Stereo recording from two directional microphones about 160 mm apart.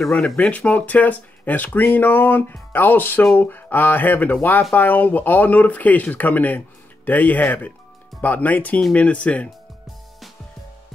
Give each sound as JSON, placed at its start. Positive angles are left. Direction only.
{"t": 0.0, "sound": "speech", "side_deg": 5}